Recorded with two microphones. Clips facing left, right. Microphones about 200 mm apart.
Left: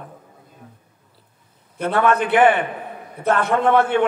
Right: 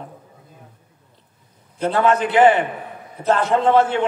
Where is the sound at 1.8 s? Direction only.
55° left (ahead or behind).